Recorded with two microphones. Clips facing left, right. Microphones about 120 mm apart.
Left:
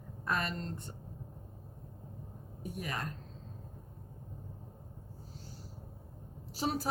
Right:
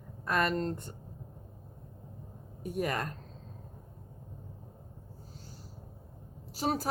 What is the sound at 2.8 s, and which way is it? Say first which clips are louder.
Speech: right 7 dB; 55° right (ahead or behind).